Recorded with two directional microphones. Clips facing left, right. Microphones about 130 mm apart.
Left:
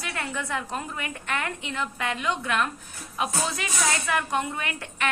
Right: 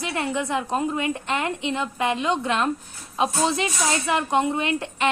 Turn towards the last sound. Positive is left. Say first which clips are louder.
# right 8 dB
turn(degrees=-25)  # may be behind; listen again after turning